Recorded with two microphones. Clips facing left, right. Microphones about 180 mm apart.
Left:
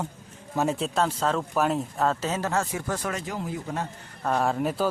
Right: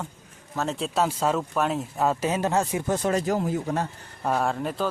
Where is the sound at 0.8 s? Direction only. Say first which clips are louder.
Right 1 dB; 5° right (ahead or behind).